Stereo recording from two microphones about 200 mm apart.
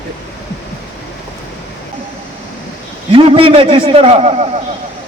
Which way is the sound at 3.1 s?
25° right (ahead or behind).